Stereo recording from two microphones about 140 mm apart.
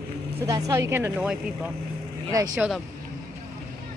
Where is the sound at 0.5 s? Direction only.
25° right (ahead or behind).